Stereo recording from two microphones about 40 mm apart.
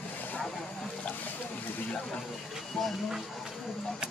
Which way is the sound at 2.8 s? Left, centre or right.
Centre.